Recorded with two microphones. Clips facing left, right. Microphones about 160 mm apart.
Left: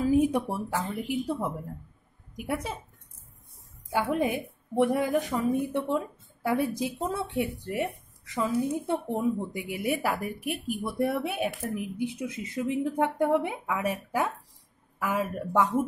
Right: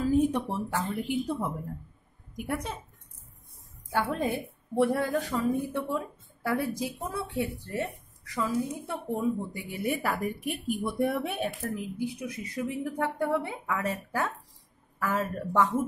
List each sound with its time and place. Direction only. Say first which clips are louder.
0.0 s a woman's voice: left 2 dB; 10° left (ahead or behind)
3.9 s a woman's voice: left 2 dB; 15° left (ahead or behind)
8.4 s a woman's voice: left 3 dB; 25° left (ahead or behind); by 11.8 s 10° left (ahead or behind)
11.8 s a woman's voice: left 2 dB; 20° left (ahead or behind)